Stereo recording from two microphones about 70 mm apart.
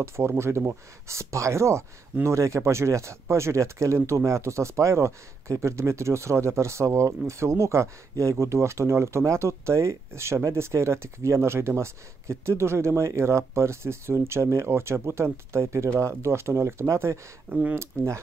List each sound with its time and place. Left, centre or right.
0.0 s speech: right
17.5 s speech: centre
17.7 s speech: right